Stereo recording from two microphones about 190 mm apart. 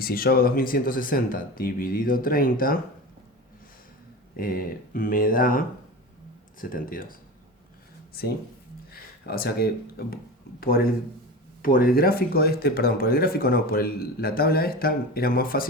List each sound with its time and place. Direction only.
0.0 s speech: 50° left (ahead or behind)
4.4 s speech: 50° left (ahead or behind)
8.9 s a sound: 50° left (ahead or behind)
10.6 s speech: 50° left (ahead or behind)